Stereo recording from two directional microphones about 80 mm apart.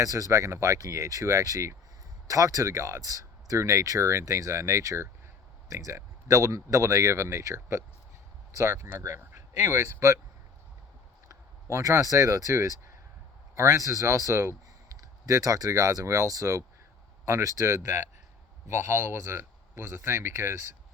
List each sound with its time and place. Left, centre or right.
0.0 s speech: right
11.3 s speech: right